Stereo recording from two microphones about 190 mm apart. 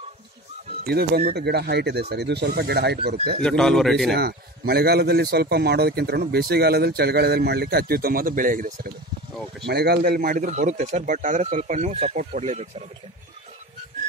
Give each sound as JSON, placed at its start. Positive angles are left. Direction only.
{"t": 0.8, "sound": "a man's voice", "side_deg": -55}
{"t": 3.4, "sound": "a man's voice", "side_deg": 5}
{"t": 4.1, "sound": "a man's voice", "side_deg": -55}
{"t": 9.7, "sound": "a man's voice", "side_deg": -55}